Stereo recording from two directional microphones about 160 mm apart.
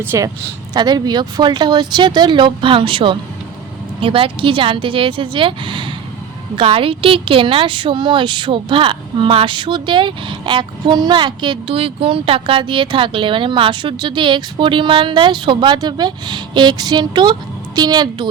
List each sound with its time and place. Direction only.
0.0 s a woman's voice: 15° right (ahead or behind)
0.7 s a woman's voice: 25° right (ahead or behind)